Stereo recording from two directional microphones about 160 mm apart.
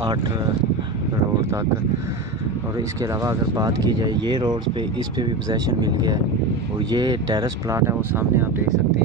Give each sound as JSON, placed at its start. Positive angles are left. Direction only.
{"t": 3.0, "sound": "speech", "side_deg": -20}